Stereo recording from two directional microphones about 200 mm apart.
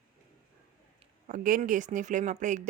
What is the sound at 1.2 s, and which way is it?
Speech, 40° right (ahead or behind).